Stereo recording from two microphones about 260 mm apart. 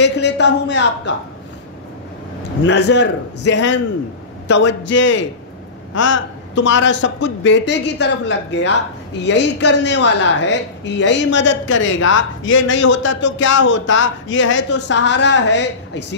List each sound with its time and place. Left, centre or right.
0.0 s a man's voice: left
2.6 s a woman's voice: left